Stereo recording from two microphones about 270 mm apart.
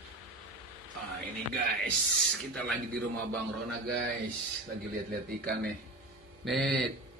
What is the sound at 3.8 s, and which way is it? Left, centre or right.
Speech, right.